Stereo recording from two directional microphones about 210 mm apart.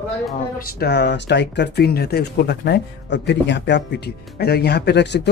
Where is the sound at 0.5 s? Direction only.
45° left (ahead or behind).